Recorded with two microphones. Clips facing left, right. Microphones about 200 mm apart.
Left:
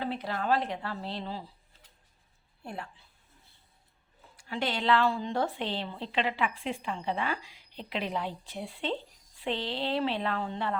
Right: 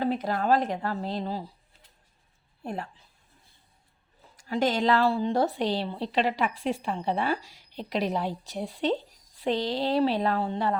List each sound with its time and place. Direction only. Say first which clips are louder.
0.0 s speech: right 6 dB; 45° right (ahead or behind)
2.6 s a woman's voice: right 6 dB; 40° right (ahead or behind)
4.4 s a woman's voice: right 7 dB; 40° right (ahead or behind)